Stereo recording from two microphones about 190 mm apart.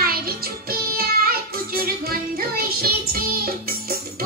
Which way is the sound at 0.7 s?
50° right (ahead or behind).